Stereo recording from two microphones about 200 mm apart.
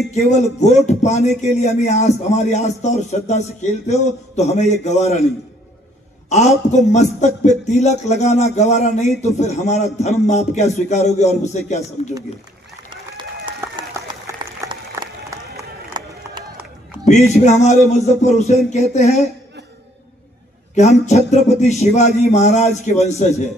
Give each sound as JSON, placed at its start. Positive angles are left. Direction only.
{"t": 0.3, "sound": "a man's voice", "side_deg": 35}
{"t": 6.2, "sound": "a woman's voice", "side_deg": 35}
{"t": 14.2, "sound": "run", "side_deg": -20}
{"t": 17.0, "sound": "a man's voice", "side_deg": 35}
{"t": 21.0, "sound": "a man's voice", "side_deg": 35}